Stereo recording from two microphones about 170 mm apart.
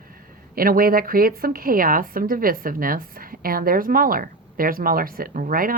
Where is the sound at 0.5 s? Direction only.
60° right (ahead or behind).